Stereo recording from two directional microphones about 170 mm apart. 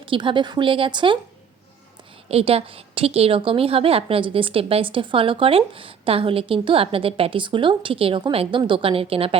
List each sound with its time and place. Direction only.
0.0 s a woman's voice: 30° right (ahead or behind)
2.3 s a woman's voice: 35° right (ahead or behind)